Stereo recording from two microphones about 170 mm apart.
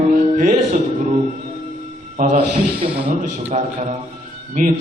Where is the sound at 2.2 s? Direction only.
55° right (ahead or behind).